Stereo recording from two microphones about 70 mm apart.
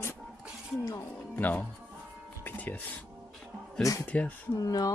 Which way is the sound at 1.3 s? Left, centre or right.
Left.